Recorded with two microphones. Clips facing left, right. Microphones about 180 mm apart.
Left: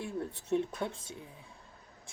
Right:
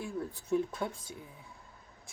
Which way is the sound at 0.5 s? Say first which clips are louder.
Even; 25° left (ahead or behind).